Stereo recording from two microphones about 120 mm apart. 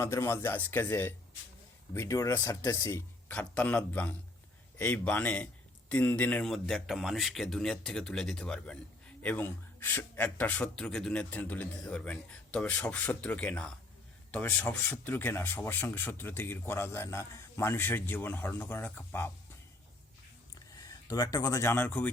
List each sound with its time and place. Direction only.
0.0 s speech: 20° left (ahead or behind)
3.2 s a man's voice: 15° left (ahead or behind)
20.8 s speech: 30° left (ahead or behind)